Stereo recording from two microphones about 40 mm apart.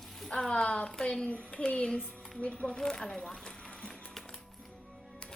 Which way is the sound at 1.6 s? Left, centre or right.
Left.